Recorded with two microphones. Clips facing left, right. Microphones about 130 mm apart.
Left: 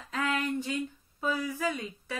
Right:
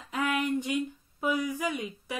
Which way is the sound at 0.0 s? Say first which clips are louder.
Right 2 dB; 15° right (ahead or behind).